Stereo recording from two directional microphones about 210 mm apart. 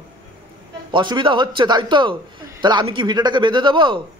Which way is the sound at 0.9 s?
20° right (ahead or behind).